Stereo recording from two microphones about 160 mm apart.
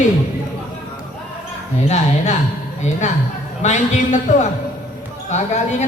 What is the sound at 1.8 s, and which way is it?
Speech, 45° left (ahead or behind).